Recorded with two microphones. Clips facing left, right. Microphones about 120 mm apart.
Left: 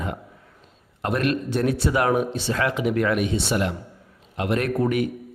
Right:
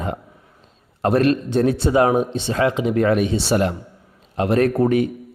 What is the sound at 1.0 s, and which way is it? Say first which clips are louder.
A man's voice: right 6 dB; 35° right (ahead or behind).